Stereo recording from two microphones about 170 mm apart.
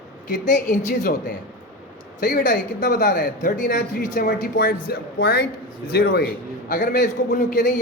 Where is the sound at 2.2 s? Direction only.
55° left (ahead or behind).